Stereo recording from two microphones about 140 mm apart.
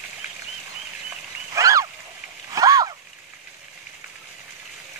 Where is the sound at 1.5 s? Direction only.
25° right (ahead or behind).